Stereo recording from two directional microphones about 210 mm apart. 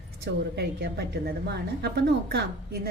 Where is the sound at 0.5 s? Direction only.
50° right (ahead or behind).